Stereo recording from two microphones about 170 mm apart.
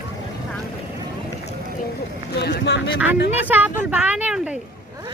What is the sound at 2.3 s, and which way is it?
Speech, 80° left.